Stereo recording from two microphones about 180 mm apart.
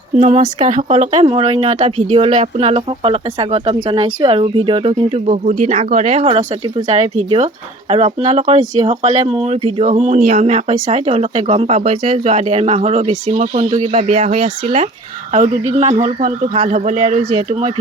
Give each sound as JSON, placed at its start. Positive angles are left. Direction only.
{"t": 0.2, "sound": "speech", "side_deg": -35}